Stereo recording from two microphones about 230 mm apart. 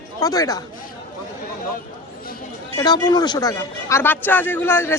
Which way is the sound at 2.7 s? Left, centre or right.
Centre.